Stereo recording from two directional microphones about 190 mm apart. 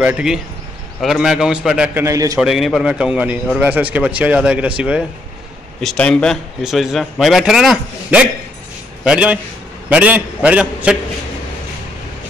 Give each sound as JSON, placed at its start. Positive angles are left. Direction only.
{"t": 0.0, "sound": "a man's voice", "side_deg": -5}
{"t": 2.0, "sound": "speech", "side_deg": -15}
{"t": 2.4, "sound": "a man's voice", "side_deg": 0}